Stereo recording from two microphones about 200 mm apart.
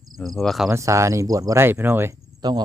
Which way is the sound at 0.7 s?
15° right (ahead or behind).